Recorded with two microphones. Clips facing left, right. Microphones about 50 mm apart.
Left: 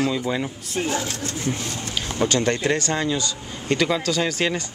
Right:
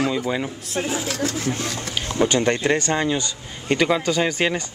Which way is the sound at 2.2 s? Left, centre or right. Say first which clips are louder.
Right 2 dB; centre.